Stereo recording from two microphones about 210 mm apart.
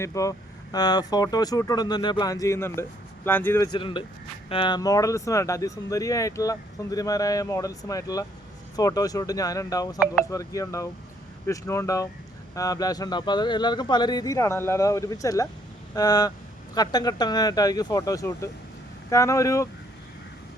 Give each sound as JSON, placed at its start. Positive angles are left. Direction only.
{"t": 0.0, "sound": "speech", "side_deg": 15}